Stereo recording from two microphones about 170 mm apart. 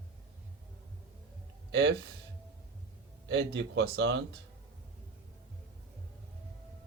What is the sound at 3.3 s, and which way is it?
A man's voice, 90° right.